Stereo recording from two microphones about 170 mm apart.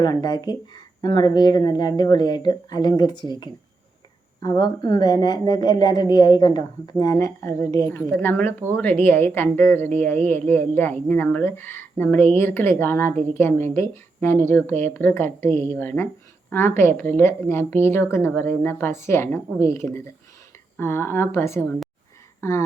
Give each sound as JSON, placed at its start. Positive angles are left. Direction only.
{"t": 0.0, "sound": "a woman's voice", "side_deg": 25}